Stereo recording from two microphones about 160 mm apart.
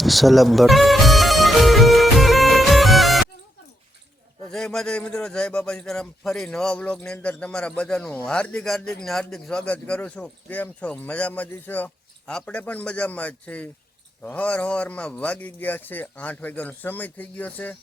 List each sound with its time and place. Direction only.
0.0 s music: centre (ahead or behind)
4.5 s a man's voice: 5° left (ahead or behind)